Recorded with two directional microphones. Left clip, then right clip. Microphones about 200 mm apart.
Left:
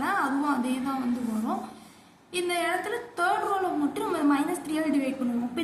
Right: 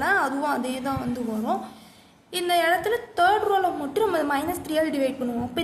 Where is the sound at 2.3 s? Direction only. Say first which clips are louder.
Right 6 dB; 55° right (ahead or behind).